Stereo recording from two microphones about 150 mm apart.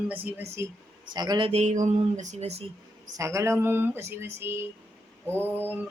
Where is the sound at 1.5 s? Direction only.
50° right (ahead or behind).